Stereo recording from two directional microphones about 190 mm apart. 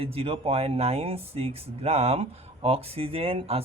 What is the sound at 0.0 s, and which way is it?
Speech, 30° right (ahead or behind).